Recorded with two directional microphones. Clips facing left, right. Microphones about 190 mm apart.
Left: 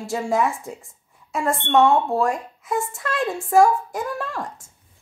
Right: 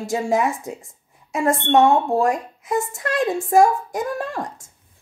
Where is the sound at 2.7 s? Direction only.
45° right (ahead or behind).